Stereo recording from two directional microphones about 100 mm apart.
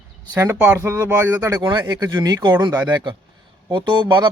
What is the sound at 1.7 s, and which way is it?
A man's voice, 45° right (ahead or behind).